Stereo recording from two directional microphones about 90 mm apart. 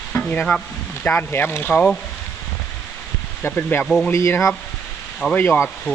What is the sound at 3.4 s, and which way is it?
Speech, 25° left (ahead or behind).